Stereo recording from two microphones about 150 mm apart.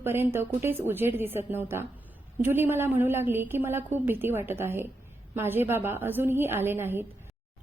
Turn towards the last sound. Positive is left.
turn(degrees=-15)  # may be behind; listen again after turning